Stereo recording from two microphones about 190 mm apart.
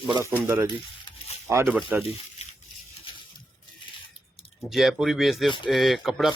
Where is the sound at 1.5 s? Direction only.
15° right (ahead or behind).